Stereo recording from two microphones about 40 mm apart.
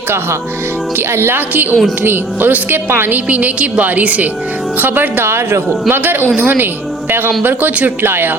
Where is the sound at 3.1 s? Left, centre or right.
Right.